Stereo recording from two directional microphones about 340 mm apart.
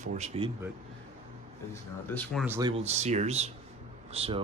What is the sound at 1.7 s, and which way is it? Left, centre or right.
Speech, centre.